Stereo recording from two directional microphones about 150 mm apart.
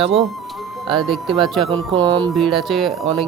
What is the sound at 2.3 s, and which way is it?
Speech, centre (ahead or behind).